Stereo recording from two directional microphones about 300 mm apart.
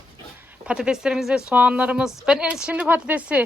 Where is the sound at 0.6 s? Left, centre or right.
Centre.